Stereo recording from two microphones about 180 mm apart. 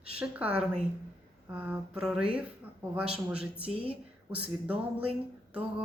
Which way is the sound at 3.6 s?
30° right (ahead or behind).